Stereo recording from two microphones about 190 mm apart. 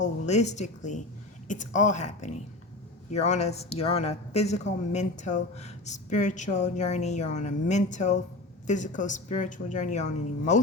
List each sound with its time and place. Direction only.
0.0 s speech: 35° left (ahead or behind)